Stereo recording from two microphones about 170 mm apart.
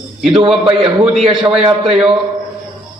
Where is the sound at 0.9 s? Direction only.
30° right (ahead or behind).